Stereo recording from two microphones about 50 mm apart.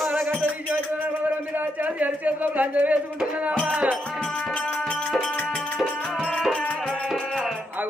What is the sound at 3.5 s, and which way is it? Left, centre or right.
Music, centre.